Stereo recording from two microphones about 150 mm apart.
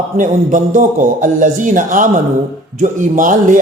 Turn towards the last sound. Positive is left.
turn(degrees=-60)  # may be behind; listen again after turning